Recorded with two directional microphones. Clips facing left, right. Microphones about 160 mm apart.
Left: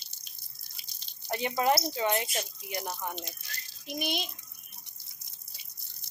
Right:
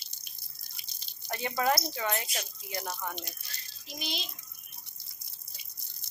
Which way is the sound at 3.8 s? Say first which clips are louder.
Left 6 dB; 55° left (ahead or behind).